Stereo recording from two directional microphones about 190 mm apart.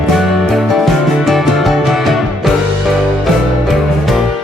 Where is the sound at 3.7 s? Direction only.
Centre (ahead or behind).